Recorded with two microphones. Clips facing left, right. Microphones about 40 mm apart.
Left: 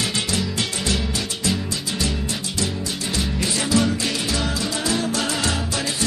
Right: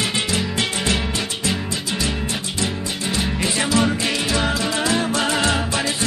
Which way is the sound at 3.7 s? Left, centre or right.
Right.